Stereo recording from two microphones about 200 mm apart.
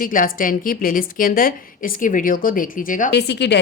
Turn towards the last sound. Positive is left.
turn(degrees=55)  # may be behind; listen again after turning